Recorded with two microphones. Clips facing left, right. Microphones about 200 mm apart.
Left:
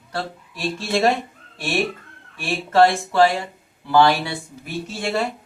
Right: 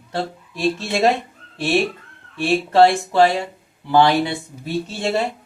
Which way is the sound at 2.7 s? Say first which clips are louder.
Right 1 dB; 15° right (ahead or behind).